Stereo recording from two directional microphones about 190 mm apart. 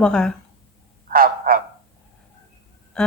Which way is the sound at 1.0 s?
50° right (ahead or behind).